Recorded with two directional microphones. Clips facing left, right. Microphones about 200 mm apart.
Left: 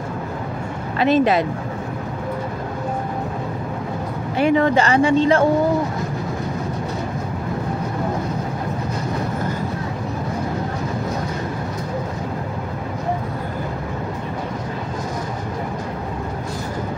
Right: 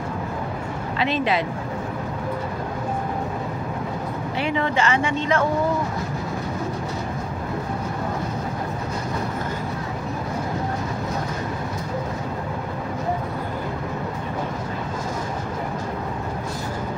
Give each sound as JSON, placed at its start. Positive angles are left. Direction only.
{"t": 0.9, "sound": "speech", "side_deg": 45}
{"t": 4.4, "sound": "speech", "side_deg": 45}